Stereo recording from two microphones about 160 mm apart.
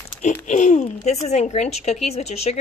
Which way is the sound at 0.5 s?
50° left (ahead or behind).